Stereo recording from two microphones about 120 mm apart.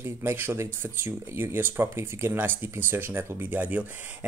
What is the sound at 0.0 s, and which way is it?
Speech, 20° right (ahead or behind).